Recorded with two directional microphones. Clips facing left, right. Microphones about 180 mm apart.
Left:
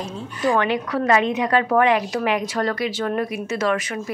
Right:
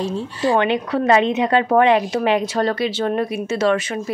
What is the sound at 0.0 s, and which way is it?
Speech, 30° right (ahead or behind).